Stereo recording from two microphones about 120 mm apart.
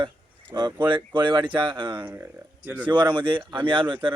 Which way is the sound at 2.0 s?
20° right (ahead or behind).